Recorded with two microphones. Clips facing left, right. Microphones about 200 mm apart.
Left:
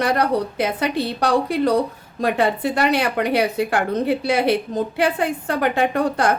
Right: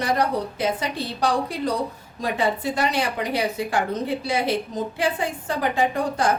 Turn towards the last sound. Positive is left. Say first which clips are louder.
# left 3 dB
turn(degrees=65)  # may be behind; listen again after turning